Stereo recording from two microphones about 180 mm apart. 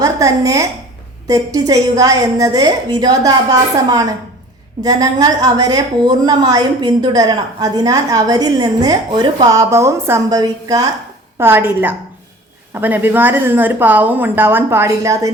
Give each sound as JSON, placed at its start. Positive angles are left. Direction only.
{"t": 0.0, "sound": "a woman's voice", "side_deg": -15}